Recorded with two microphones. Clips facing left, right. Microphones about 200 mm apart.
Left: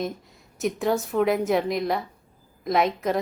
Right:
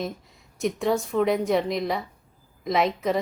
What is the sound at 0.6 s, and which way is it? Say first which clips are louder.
A woman's voice: even; centre (ahead or behind).